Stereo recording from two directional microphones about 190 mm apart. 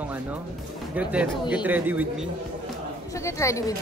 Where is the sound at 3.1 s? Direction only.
15° left (ahead or behind).